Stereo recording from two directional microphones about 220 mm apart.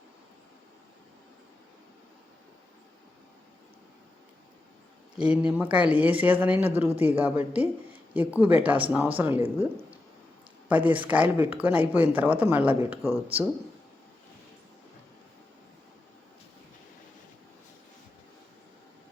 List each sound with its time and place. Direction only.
5.2 s speech: 5° right (ahead or behind)
10.7 s speech: 5° right (ahead or behind)